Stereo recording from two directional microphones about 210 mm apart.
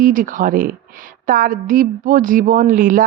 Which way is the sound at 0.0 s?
40° right (ahead or behind).